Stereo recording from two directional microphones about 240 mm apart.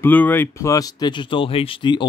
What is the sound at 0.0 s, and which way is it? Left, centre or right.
Speech, centre.